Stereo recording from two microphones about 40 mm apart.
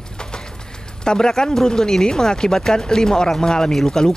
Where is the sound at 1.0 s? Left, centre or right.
Centre.